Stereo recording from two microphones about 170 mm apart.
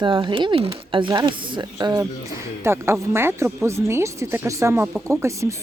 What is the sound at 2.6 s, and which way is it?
Speech, 15° right (ahead or behind).